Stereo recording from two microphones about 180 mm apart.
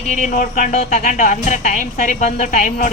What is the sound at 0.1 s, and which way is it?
Speech, 45° left (ahead or behind).